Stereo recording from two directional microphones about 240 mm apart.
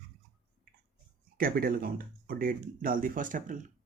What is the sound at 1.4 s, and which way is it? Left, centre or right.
Speech, right.